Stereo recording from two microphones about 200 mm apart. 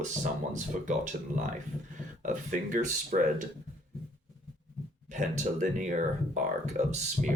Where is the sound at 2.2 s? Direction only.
40° right (ahead or behind).